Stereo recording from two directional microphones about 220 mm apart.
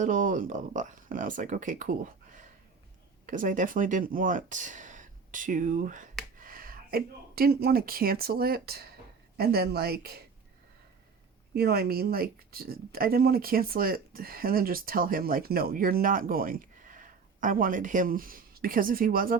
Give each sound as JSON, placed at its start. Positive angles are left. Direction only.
{"t": 0.0, "sound": "a woman's voice", "side_deg": -35}
{"t": 11.5, "sound": "speech", "side_deg": -45}